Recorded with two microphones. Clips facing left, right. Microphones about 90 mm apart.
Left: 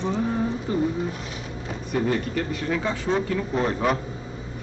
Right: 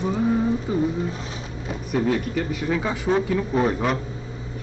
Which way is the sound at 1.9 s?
5° right (ahead or behind).